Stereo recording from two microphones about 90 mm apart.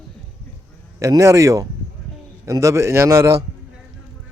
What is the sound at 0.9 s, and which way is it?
Speech, 35° right (ahead or behind).